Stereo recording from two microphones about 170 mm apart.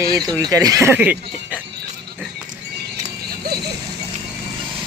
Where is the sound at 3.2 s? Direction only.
60° right (ahead or behind).